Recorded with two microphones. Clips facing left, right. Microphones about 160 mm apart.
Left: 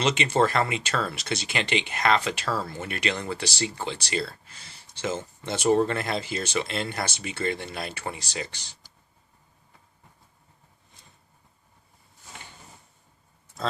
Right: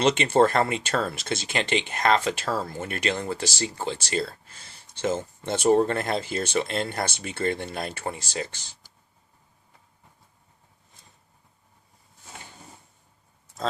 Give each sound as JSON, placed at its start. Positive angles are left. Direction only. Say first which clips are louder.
{"t": 0.0, "sound": "speech", "louder": "right 3 dB", "side_deg": -55}